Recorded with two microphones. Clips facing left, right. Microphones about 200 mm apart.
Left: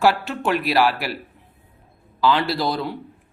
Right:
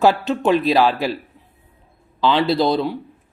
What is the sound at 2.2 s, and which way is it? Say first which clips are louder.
Speech: right 3 dB; 20° right (ahead or behind).